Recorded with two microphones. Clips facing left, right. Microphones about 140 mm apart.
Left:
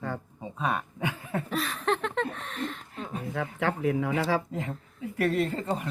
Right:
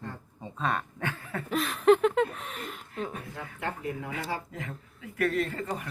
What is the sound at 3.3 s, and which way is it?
Speech, 90° left.